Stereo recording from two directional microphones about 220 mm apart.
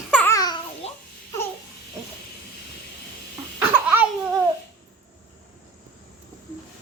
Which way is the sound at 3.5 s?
10° right (ahead or behind).